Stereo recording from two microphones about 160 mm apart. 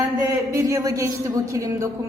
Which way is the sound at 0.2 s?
20° right (ahead or behind).